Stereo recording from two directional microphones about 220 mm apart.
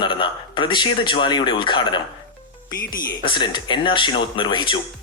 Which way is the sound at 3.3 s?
20° left (ahead or behind).